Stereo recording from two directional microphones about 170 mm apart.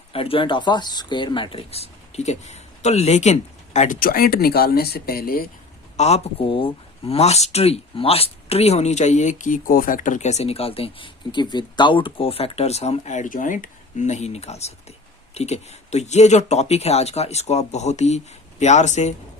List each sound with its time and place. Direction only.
0.1 s speech: 35° left (ahead or behind); by 5.5 s 60° left (ahead or behind)
6.0 s speech: 40° left (ahead or behind)